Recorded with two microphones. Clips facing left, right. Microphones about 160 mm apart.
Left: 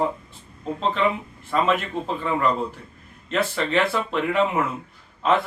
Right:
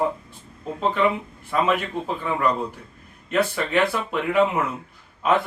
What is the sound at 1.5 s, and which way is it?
Speech, 5° right (ahead or behind).